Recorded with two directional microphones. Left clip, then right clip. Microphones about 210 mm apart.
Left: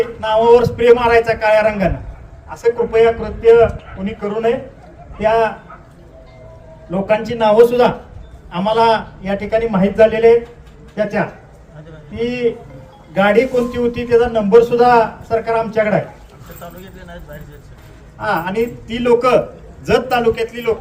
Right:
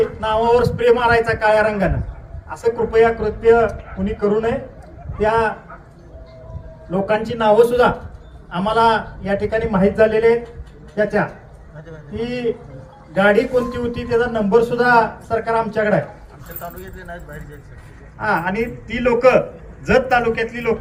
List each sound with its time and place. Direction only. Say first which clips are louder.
0.2 s a man's voice: left 7 dB; centre (ahead or behind)
5.2 s a man's voice: left 3 dB; centre (ahead or behind)
6.9 s a man's voice: left 2 dB; centre (ahead or behind)
16.6 s speech: right 3 dB; 25° right (ahead or behind)
18.2 s a man's voice: left 2 dB; 65° left (ahead or behind)